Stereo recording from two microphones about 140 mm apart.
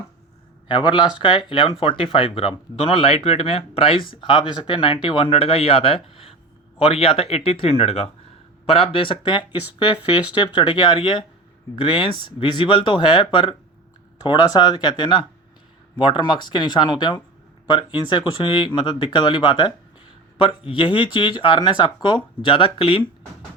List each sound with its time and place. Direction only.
0.7 s speech: 35° left (ahead or behind)